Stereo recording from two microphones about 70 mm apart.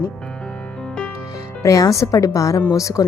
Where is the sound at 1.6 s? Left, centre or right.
Left.